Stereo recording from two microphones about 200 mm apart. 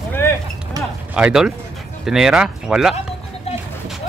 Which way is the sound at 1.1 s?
5° right (ahead or behind).